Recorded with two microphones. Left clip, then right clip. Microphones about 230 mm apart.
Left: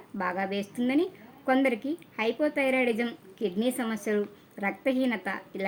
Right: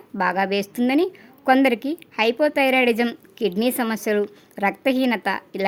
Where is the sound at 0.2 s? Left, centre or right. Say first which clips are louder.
Right 9 dB; right.